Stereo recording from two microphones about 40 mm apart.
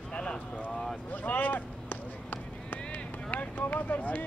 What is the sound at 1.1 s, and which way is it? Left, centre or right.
Run, left.